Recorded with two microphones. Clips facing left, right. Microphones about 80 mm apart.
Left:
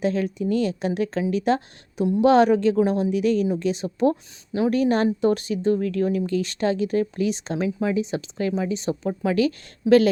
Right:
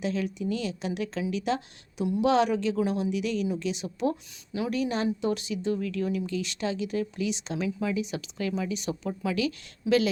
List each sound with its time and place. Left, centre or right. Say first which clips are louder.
0.0 s speech: left 6 dB; left